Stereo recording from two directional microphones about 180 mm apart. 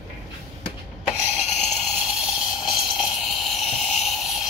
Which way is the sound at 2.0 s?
5° right (ahead or behind).